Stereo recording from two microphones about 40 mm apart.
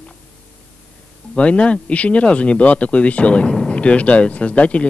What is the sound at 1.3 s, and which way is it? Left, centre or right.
Speech, left.